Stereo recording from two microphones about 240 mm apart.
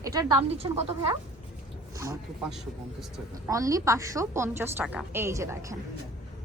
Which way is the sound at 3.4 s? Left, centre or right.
Centre.